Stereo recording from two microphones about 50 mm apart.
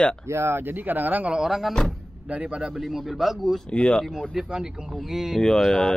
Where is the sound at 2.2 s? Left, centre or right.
Right.